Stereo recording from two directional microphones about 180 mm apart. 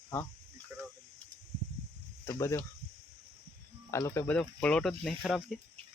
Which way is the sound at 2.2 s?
15° left (ahead or behind).